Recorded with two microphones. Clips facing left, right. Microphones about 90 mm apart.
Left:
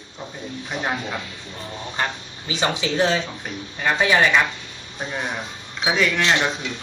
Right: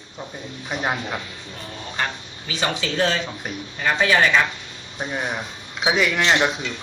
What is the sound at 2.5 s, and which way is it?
Speech, 20° left (ahead or behind).